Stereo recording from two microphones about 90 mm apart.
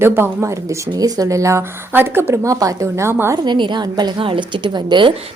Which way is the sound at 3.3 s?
55° right (ahead or behind).